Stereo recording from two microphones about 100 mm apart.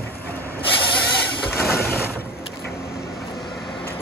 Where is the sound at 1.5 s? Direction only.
25° left (ahead or behind).